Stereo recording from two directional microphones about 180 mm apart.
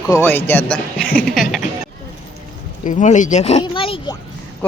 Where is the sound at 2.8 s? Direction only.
45° left (ahead or behind); by 4.1 s 30° left (ahead or behind).